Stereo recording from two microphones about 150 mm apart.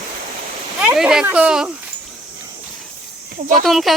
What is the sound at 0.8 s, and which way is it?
Speech, 5° right (ahead or behind).